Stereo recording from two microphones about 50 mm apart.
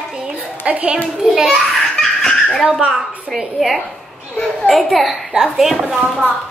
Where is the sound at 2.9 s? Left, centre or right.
Centre.